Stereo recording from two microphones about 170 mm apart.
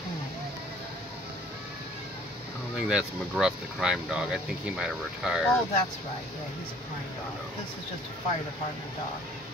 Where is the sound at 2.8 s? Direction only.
5° right (ahead or behind).